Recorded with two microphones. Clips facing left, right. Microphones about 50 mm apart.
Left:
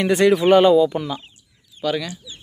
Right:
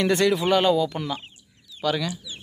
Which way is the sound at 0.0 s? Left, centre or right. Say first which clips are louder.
Left 5 dB; left.